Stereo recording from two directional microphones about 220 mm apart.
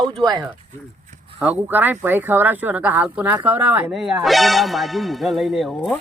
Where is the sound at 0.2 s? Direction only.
20° right (ahead or behind).